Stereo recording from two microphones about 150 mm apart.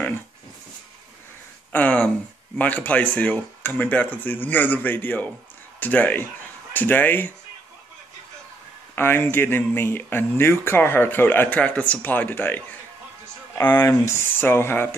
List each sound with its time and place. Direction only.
1.7 s a sound: 10° left (ahead or behind)
2.5 s speech: 10° left (ahead or behind)
8.9 s speech: 15° left (ahead or behind)
13.7 s speech: 20° left (ahead or behind)